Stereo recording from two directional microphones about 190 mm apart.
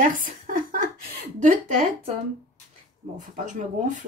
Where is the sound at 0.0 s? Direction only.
45° right (ahead or behind).